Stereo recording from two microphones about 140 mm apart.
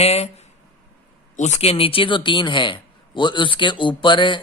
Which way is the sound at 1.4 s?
55° left (ahead or behind).